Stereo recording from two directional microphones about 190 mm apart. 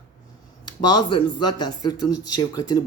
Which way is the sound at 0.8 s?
20° left (ahead or behind).